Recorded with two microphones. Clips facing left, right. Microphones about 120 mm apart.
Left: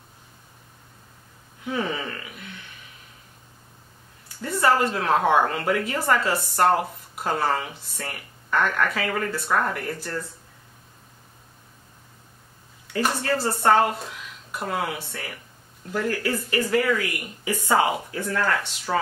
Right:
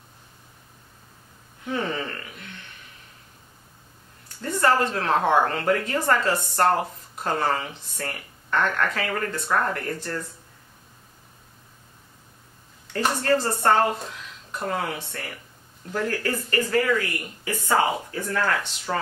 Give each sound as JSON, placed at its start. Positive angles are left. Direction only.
{"t": 1.7, "sound": "speech", "side_deg": 10}
{"t": 4.4, "sound": "a woman's voice", "side_deg": 5}
{"t": 12.9, "sound": "a woman's voice", "side_deg": 5}
{"t": 18.1, "sound": "a woman's voice", "side_deg": 0}